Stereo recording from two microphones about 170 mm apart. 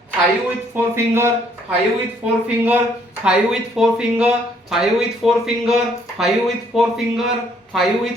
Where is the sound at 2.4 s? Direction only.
10° right (ahead or behind).